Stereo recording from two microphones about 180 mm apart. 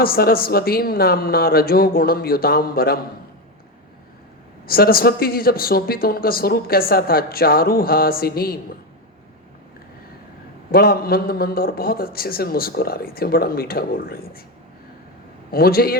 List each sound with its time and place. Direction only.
0.0 s speech: 55° left (ahead or behind)
4.6 s speech: 55° left (ahead or behind)
10.7 s speech: 55° left (ahead or behind)
15.5 s speech: 55° left (ahead or behind)